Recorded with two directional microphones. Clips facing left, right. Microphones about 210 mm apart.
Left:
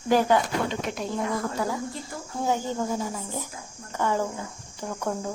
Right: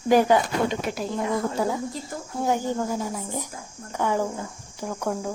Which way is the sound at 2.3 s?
10° right (ahead or behind).